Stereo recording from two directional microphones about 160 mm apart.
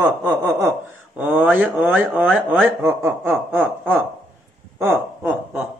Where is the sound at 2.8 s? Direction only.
15° right (ahead or behind).